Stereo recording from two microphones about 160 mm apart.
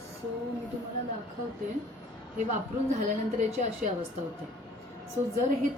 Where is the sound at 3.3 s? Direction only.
50° right (ahead or behind).